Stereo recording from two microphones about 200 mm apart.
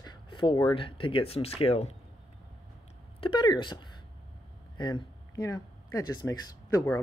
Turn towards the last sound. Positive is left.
turn(degrees=15)  # may be behind; listen again after turning